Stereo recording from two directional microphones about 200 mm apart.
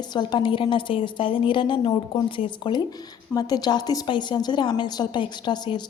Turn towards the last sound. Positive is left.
turn(degrees=20)  # may be behind; listen again after turning